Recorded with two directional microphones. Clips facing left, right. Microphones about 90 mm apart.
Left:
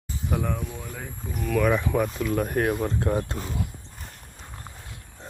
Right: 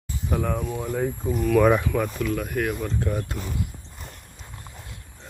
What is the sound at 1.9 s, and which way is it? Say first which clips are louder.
Speech: left 1 dB; 25° left (ahead or behind).